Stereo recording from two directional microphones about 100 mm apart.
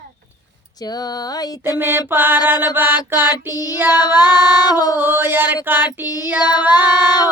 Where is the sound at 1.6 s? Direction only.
20° right (ahead or behind).